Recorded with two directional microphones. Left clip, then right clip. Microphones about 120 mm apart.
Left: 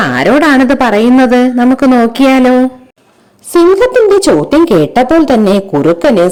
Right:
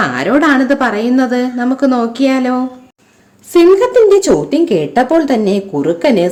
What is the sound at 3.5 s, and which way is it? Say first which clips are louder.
Speech: left 1 dB; 55° left (ahead or behind).